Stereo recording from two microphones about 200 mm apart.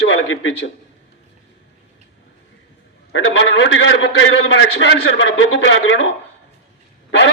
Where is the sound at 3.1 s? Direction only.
70° left (ahead or behind).